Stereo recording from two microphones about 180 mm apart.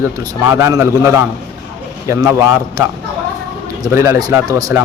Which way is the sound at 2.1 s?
15° right (ahead or behind).